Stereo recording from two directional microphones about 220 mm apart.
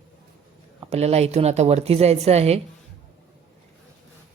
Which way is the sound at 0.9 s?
30° right (ahead or behind).